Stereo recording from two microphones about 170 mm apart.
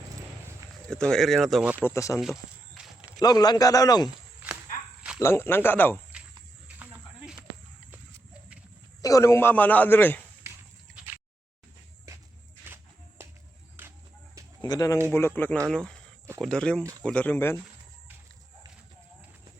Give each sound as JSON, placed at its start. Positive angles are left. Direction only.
{"t": 0.9, "sound": "speech", "side_deg": 5}
{"t": 1.8, "sound": "a man's voice", "side_deg": 20}
{"t": 2.1, "sound": "walk", "side_deg": 0}
{"t": 3.2, "sound": "a man's voice", "side_deg": 20}
{"t": 5.2, "sound": "a man's voice", "side_deg": 15}
{"t": 7.9, "sound": "horse", "side_deg": -5}
{"t": 9.0, "sound": "a man's voice", "side_deg": 20}
{"t": 10.9, "sound": "a sound", "side_deg": -10}
{"t": 12.6, "sound": "walk", "side_deg": -15}
{"t": 14.6, "sound": "a man's voice", "side_deg": 20}